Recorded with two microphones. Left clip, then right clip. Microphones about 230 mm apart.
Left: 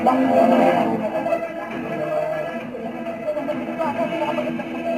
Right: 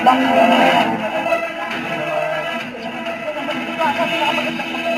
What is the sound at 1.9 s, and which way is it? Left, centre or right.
Music, right.